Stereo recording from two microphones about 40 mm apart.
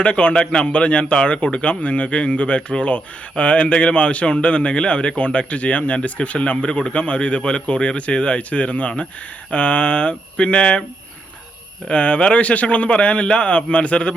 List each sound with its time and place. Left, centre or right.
0.0 s a man's voice: left
11.9 s a man's voice: left